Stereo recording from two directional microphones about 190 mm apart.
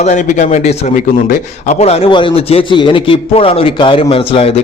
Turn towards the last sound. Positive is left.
turn(degrees=30)  # may be behind; listen again after turning